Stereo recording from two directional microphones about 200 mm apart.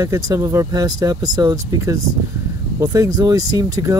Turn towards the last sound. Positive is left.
turn(degrees=-15)  # may be behind; listen again after turning